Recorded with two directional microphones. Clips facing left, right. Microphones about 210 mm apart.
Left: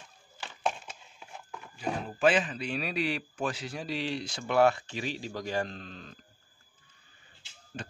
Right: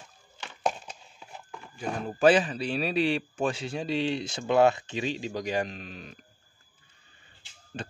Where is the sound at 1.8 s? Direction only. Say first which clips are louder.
Right 3 dB; 45° right (ahead or behind); by 6.1 s 15° right (ahead or behind).